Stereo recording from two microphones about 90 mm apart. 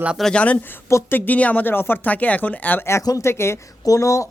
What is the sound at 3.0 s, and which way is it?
Speech, 40° left (ahead or behind).